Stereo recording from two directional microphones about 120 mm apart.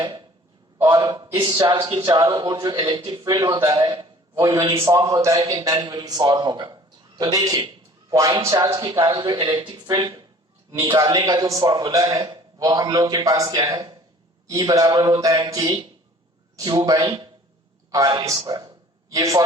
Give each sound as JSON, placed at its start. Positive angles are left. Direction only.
{"t": 0.0, "sound": "a man's voice", "side_deg": -40}
{"t": 1.6, "sound": "a man's voice", "side_deg": -40}